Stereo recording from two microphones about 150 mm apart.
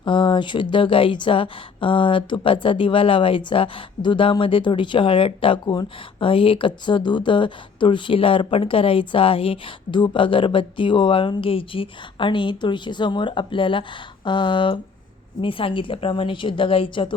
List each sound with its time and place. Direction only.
0.0 s speech: 35° left (ahead or behind)